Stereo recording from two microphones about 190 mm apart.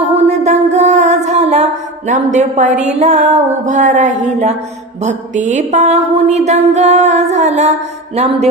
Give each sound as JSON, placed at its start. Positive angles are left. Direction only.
{"t": 0.2, "sound": "mantra", "side_deg": -35}